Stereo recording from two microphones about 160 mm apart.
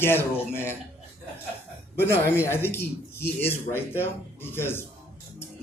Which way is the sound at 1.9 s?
15° left (ahead or behind).